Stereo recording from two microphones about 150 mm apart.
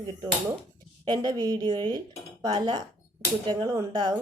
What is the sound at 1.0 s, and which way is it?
A woman's voice, 30° right (ahead or behind).